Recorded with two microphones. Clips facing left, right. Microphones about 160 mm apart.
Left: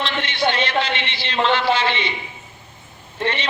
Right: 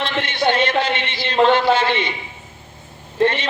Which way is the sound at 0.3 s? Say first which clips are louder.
Right 4 dB; 50° right (ahead or behind).